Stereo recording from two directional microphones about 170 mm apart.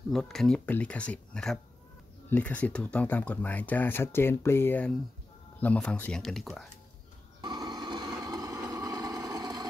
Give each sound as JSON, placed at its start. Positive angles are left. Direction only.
{"t": 0.1, "sound": "speech", "side_deg": 0}
{"t": 7.4, "sound": "vehicle", "side_deg": -25}